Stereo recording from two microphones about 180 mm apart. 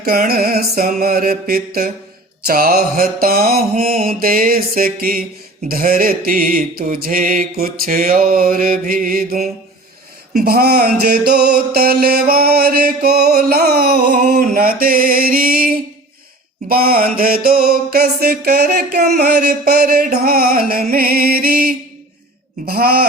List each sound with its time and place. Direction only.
0.0 s mantra: 60° right (ahead or behind)